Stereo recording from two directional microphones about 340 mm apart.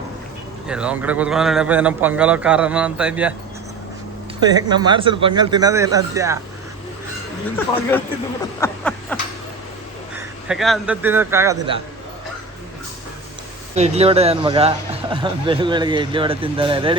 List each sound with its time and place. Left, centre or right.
0.7 s a man's voice: centre
4.4 s speech: centre
7.5 s speech: centre
8.6 s a sound: centre
10.2 s a man's voice: centre
13.7 s speech: centre